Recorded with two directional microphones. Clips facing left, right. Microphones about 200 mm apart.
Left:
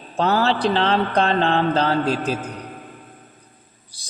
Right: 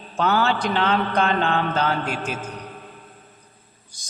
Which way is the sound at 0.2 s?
35° left (ahead or behind).